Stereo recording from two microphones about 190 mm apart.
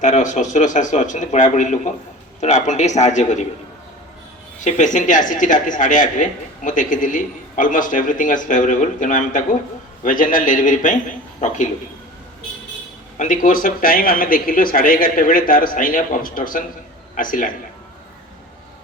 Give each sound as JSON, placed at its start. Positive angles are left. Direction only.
{"t": 0.0, "sound": "a man's voice", "side_deg": 40}
{"t": 4.6, "sound": "speech", "side_deg": 40}
{"t": 13.1, "sound": "speech", "side_deg": 45}